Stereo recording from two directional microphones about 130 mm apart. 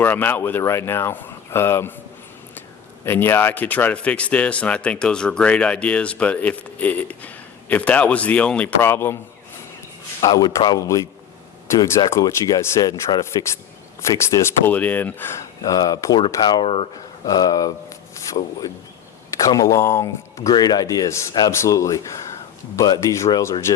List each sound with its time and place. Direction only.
0.0 s speech: 15° left (ahead or behind)
10.2 s speech: 30° left (ahead or behind); by 15.4 s 15° left (ahead or behind)
15.6 s speech: 30° left (ahead or behind)
16.6 s speech: 50° left (ahead or behind)
17.2 s a sound: 30° left (ahead or behind)
19.3 s speech: 25° left (ahead or behind)
20.5 s speech: 30° left (ahead or behind)